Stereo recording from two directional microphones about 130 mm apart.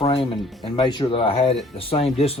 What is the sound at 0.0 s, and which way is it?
Music, 45° left (ahead or behind).